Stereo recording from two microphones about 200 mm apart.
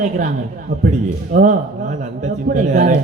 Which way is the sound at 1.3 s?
45° right (ahead or behind).